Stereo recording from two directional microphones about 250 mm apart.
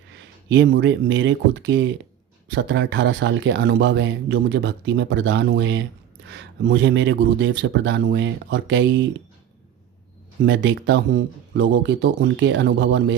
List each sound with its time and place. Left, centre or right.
0.5 s speech: right
6.2 s a sound: right
6.7 s speech: right
10.4 s speech: right